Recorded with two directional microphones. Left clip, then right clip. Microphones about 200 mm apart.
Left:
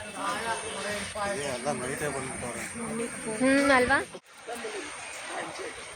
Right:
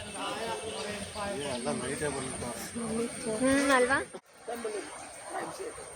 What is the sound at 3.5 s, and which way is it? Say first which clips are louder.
Speech: left 3 dB; 55° left (ahead or behind).